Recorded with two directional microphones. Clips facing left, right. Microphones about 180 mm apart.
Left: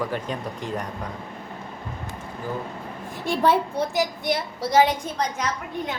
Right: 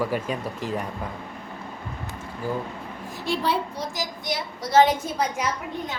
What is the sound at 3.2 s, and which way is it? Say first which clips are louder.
A woman's voice: left 4 dB; 50° left (ahead or behind).